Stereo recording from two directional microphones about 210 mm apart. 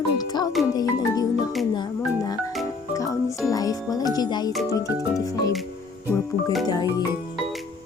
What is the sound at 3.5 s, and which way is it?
Speech, 15° left (ahead or behind).